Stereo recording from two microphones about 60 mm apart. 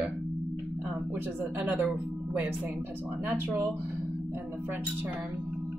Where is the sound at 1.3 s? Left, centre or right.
Right.